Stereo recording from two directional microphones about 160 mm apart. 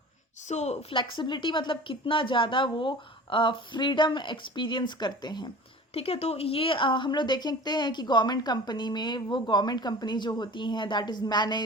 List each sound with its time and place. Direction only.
0.4 s a woman's voice: 45° left (ahead or behind); by 5.5 s 25° left (ahead or behind)
5.9 s a woman's voice: 35° left (ahead or behind)